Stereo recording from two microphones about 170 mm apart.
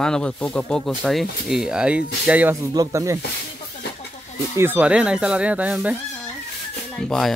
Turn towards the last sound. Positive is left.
turn(degrees=5)  # may be behind; listen again after turning